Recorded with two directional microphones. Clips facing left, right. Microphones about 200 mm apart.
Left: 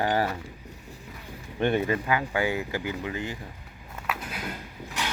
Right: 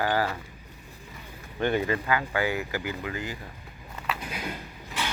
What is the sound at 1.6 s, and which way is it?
Speech, 20° left (ahead or behind).